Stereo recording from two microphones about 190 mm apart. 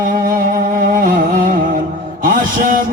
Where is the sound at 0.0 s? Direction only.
50° right (ahead or behind).